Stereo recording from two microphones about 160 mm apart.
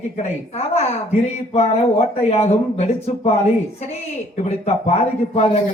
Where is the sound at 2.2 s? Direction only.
40° left (ahead or behind).